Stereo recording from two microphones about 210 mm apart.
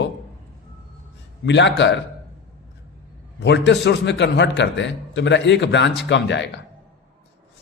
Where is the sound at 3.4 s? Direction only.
55° left (ahead or behind).